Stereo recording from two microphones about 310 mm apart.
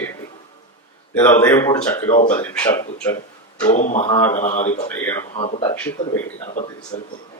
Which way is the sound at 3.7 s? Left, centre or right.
Left.